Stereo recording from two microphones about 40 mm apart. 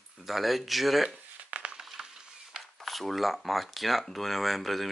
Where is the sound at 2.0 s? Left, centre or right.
Centre.